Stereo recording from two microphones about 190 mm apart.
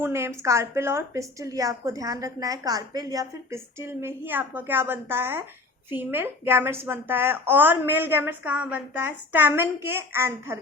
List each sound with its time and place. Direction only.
0.0 s a woman's voice: 15° right (ahead or behind)